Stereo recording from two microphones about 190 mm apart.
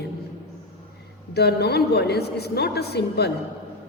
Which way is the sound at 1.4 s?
60° left (ahead or behind).